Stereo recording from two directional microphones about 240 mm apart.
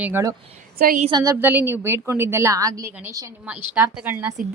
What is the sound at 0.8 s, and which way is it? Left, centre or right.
Speech, right.